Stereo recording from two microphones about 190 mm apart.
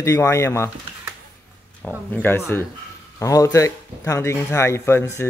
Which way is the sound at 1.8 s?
10° left (ahead or behind).